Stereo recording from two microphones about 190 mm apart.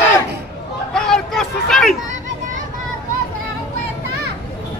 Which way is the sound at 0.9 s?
Centre (ahead or behind).